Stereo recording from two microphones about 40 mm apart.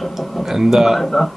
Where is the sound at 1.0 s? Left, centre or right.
Centre.